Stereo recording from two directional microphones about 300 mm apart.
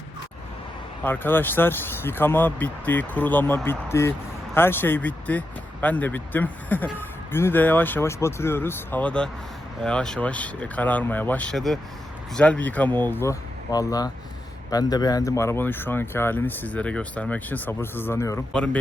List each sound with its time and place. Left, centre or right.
1.0 s speech: centre